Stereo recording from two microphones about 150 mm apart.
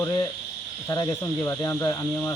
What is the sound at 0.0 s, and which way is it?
Speech, 20° left (ahead or behind).